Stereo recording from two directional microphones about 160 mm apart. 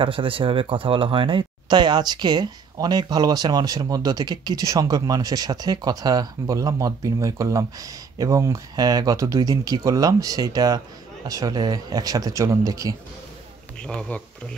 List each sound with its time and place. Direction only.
0.0 s speech: 35° right (ahead or behind)
13.7 s speech: 5° left (ahead or behind)